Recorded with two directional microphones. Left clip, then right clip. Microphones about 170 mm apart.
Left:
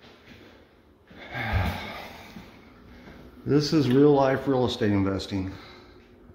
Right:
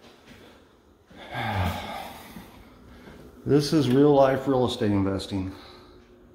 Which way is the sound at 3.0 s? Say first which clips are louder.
Right 2 dB; 10° right (ahead or behind).